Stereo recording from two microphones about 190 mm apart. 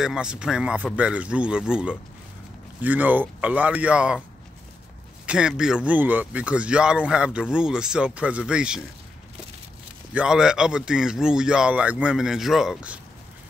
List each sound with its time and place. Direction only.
0.0 s speech: 5° right (ahead or behind)
5.2 s speech: 5° right (ahead or behind)
10.1 s speech: 5° right (ahead or behind)